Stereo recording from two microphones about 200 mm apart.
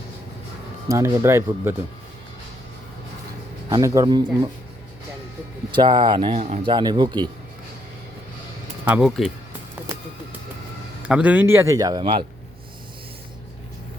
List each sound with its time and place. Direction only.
0.9 s speech: 15° right (ahead or behind)
3.7 s speech: 15° right (ahead or behind)
5.7 s speech: 20° right (ahead or behind)
8.8 s speech: 5° right (ahead or behind)
11.0 s speech: 5° right (ahead or behind); by 12.2 s 25° right (ahead or behind)